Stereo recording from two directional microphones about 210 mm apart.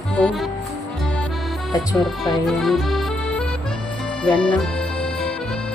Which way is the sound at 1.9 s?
Centre (ahead or behind).